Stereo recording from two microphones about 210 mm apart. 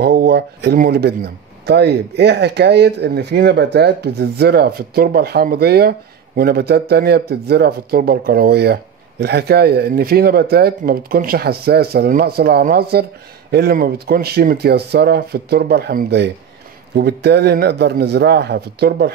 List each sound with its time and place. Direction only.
0.0 s speech: 45° right (ahead or behind)